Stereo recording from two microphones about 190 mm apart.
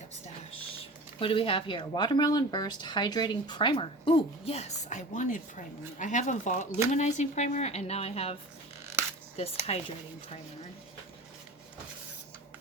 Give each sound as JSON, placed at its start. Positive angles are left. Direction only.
{"t": 1.2, "sound": "speech", "side_deg": 30}
{"t": 9.4, "sound": "speech", "side_deg": 35}